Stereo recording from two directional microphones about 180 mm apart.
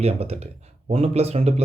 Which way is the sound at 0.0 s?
35° right (ahead or behind).